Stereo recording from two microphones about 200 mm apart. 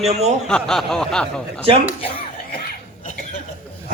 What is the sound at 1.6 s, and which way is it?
Speech, 30° right (ahead or behind).